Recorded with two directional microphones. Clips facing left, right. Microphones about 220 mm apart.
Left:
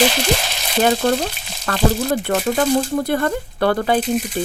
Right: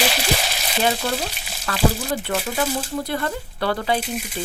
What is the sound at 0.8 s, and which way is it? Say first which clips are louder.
Speech: left 6 dB; 50° left (ahead or behind).